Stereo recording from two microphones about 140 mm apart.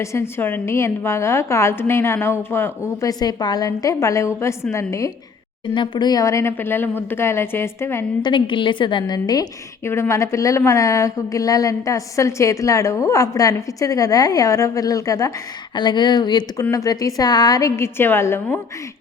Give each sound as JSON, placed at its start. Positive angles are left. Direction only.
{"t": 0.0, "sound": "a woman's voice", "side_deg": 20}
{"t": 5.7, "sound": "speech", "side_deg": 35}
{"t": 8.2, "sound": "a woman's voice", "side_deg": 35}